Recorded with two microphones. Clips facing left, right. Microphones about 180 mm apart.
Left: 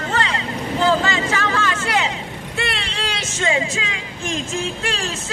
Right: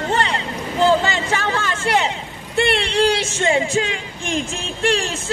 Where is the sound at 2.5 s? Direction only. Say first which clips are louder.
Right 10 dB; 30° right (ahead or behind).